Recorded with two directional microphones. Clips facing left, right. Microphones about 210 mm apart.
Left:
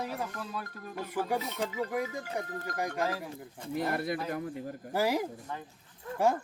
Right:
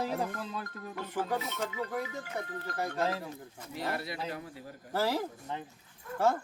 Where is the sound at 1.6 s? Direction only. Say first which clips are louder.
Left 3 dB; 35° left (ahead or behind).